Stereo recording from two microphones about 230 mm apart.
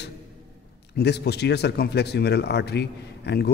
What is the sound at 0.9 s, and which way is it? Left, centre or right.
Speech, left.